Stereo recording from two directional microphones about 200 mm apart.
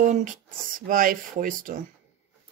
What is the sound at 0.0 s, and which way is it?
Speech, 40° right (ahead or behind).